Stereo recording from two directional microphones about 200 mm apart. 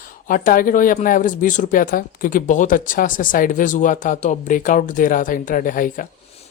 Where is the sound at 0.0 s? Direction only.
45° left (ahead or behind).